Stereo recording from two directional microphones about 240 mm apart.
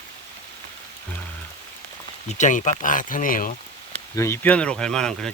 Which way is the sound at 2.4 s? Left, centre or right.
Left.